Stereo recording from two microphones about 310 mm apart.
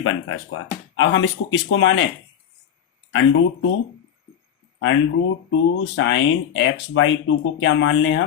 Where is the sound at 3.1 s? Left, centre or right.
Left.